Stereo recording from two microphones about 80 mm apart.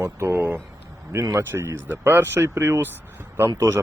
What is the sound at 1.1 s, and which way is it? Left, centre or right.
Speech, right.